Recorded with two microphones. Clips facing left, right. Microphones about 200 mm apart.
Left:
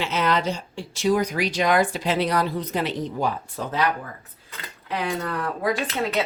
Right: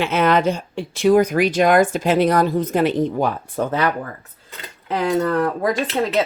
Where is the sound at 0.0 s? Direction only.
55° right (ahead or behind).